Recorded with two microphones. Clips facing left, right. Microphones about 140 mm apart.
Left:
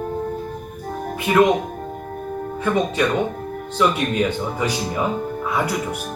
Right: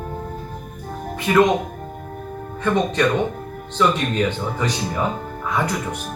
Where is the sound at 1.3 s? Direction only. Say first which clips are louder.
Even; 10° left (ahead or behind).